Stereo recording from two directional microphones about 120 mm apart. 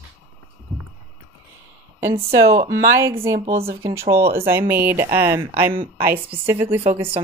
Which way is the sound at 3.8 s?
25° right (ahead or behind).